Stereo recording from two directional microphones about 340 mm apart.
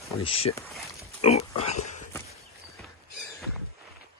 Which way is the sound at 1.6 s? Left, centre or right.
Left.